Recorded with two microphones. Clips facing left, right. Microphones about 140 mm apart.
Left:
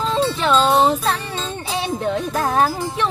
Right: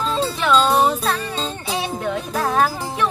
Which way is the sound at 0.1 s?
30° left (ahead or behind).